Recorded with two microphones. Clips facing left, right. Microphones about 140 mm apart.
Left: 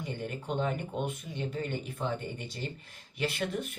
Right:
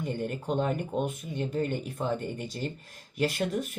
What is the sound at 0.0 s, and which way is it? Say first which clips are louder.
Speech: right 5 dB; 45° right (ahead or behind).